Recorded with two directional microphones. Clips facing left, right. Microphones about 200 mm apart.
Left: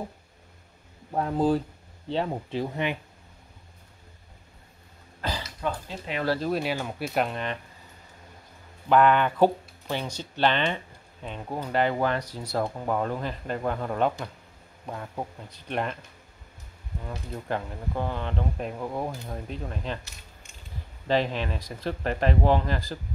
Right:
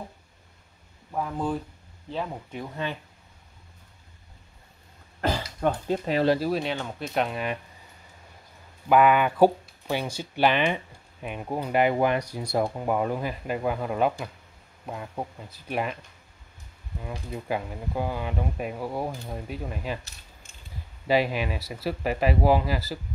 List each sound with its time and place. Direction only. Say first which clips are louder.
1.1 s speech: left 5 dB; 35° left (ahead or behind)
2.7 s speech: left 3 dB; 15° left (ahead or behind)
5.6 s speech: right 9 dB; 45° right (ahead or behind)
6.4 s speech: even; 5° left (ahead or behind)
7.2 s speech: right 1 dB; 5° right (ahead or behind)
8.8 s speech: right 1 dB; 10° right (ahead or behind)
17.3 s speech: right 1 dB; 10° right (ahead or behind)
21.1 s speech: right 2 dB; 10° right (ahead or behind)